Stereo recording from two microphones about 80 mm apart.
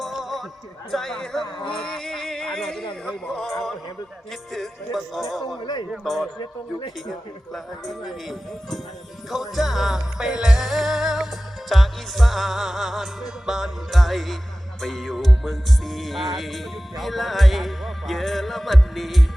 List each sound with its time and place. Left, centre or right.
0.0 s a sound: centre
0.9 s music: centre
1.4 s speech: left
2.0 s a sound: centre
3.1 s music: centre
4.5 s music: centre
6.4 s speech: left
7.5 s music: centre